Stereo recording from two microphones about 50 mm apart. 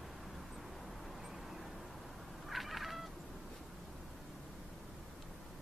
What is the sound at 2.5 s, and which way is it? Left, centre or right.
Cat, centre.